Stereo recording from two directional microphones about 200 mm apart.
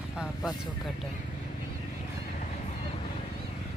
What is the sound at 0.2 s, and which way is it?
Speech, 5° right (ahead or behind).